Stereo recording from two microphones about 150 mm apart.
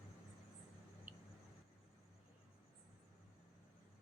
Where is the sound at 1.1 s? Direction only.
10° right (ahead or behind).